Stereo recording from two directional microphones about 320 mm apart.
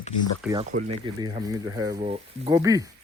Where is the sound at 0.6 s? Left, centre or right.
Centre.